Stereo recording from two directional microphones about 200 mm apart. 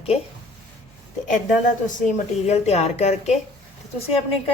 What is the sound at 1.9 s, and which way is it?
A woman's voice, 35° left (ahead or behind).